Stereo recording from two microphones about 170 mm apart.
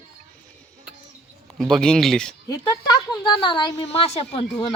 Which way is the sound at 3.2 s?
25° left (ahead or behind).